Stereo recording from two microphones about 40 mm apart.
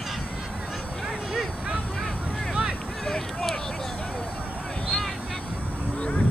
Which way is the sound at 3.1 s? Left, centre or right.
Centre.